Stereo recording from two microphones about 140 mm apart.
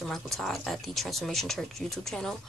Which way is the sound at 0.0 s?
Centre (ahead or behind).